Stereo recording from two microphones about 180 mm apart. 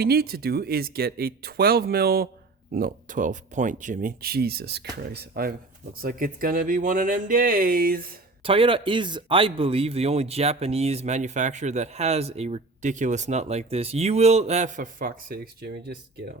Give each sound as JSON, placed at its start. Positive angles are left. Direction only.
{"t": 0.0, "sound": "speech", "side_deg": -60}
{"t": 8.4, "sound": "speech", "side_deg": -30}